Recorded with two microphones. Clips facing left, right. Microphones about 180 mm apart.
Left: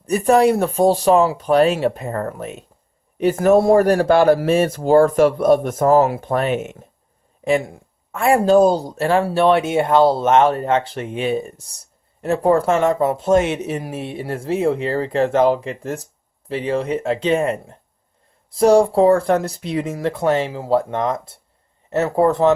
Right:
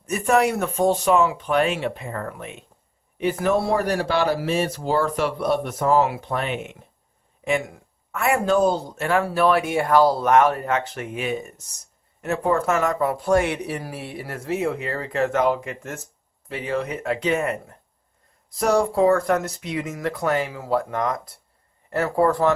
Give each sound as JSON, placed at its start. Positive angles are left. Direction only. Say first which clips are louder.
{"t": 0.0, "sound": "speech", "louder": "left 6 dB", "side_deg": 35}
{"t": 7.4, "sound": "speech", "louder": "left 5 dB", "side_deg": 35}